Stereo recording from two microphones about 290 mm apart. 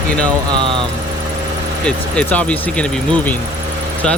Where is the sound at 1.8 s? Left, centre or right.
Centre.